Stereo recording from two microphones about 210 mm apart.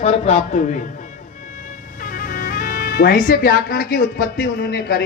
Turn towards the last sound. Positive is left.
turn(degrees=50)  # may be behind; listen again after turning